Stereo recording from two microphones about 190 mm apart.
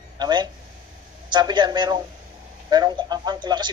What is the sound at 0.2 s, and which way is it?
Speech, 20° right (ahead or behind).